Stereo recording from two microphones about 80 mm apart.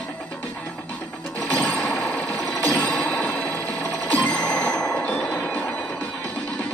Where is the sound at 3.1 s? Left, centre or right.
Centre.